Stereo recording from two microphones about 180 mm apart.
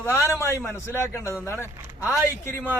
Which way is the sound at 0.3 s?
15° left (ahead or behind).